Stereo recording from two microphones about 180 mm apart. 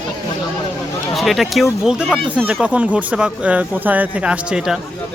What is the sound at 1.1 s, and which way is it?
Speech, centre (ahead or behind).